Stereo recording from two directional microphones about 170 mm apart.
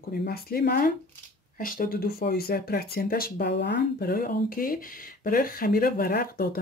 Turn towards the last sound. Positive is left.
turn(degrees=60)  # may be behind; listen again after turning